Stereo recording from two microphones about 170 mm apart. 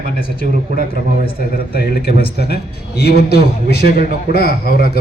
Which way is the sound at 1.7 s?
65° left (ahead or behind).